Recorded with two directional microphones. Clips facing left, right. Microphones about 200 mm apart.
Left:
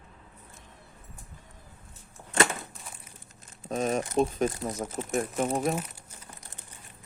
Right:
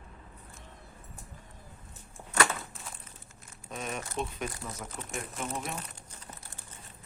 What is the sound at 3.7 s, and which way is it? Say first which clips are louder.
Speech: left 10 dB; 40° left (ahead or behind).